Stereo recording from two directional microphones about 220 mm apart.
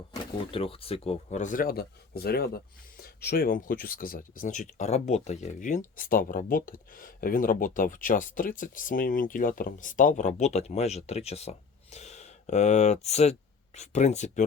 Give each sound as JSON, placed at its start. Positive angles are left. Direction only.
{"t": 0.1, "sound": "speech", "side_deg": 25}